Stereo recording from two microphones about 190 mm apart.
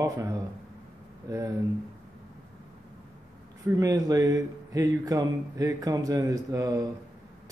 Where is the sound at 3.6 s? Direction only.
15° right (ahead or behind).